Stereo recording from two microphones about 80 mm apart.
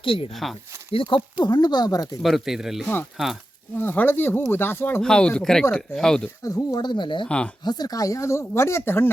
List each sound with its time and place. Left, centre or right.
0.4 s speech: centre
0.9 s speech: left
2.2 s speech: centre
2.8 s speech: left
5.0 s speech: centre
6.4 s speech: left
6.8 s speech: left
7.3 s speech: centre
7.6 s speech: left